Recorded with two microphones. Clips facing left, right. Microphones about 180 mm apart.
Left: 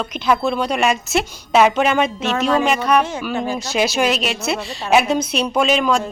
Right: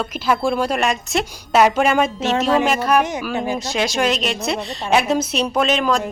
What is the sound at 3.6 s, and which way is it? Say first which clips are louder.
A woman's voice: left 2 dB; 5° left (ahead or behind).